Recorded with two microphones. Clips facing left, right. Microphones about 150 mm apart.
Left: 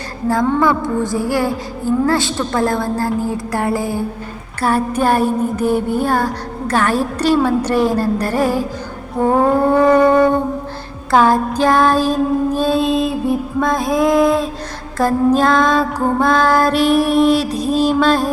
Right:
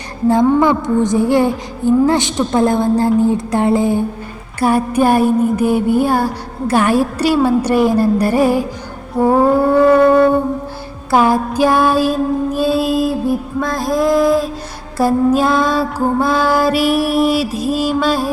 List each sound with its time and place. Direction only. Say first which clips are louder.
0.3 s music: right 3 dB; 20° right (ahead or behind); by 18.3 s 5° right (ahead or behind)